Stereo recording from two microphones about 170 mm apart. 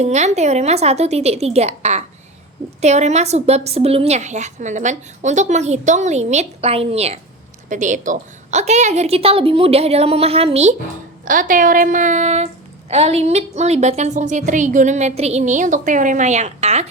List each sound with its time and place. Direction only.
0.0 s a woman's voice: 40° right (ahead or behind)
11.3 s a woman's voice: 50° right (ahead or behind)